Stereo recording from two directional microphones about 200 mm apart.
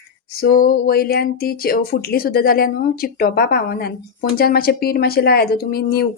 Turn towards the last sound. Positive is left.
turn(degrees=50)  # may be behind; listen again after turning